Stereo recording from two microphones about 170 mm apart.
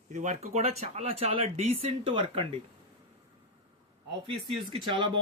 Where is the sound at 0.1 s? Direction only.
45° right (ahead or behind).